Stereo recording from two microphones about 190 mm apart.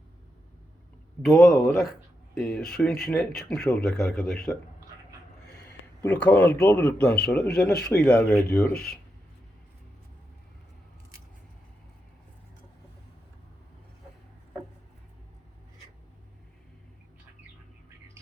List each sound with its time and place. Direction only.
1.2 s speech: centre (ahead or behind)
6.0 s speech: 10° left (ahead or behind)
8.7 s speech: 55° left (ahead or behind)